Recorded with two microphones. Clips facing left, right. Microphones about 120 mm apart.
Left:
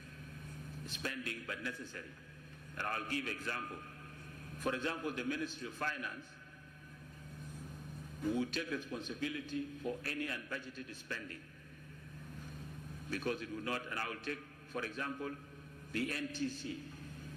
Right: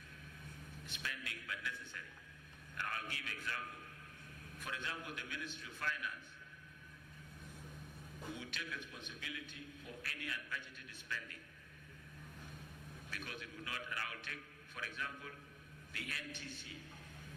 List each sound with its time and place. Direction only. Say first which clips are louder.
0.9 s a man's voice: left 6 dB; 35° left (ahead or behind)
8.4 s a man's voice: left 10 dB; 40° left (ahead or behind)
13.1 s a man's voice: left 12 dB; 40° left (ahead or behind)